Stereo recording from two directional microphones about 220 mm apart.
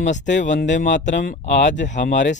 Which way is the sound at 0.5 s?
55° left (ahead or behind).